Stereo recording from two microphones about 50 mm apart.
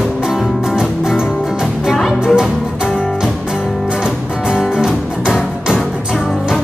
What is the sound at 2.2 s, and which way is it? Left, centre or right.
Music, centre.